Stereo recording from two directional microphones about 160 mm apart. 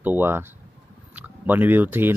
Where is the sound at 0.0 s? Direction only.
10° right (ahead or behind).